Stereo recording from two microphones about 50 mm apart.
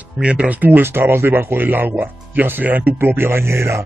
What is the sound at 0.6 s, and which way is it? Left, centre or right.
Speech, right.